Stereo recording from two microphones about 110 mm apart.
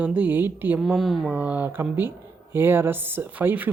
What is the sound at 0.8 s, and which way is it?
Speech, centre (ahead or behind).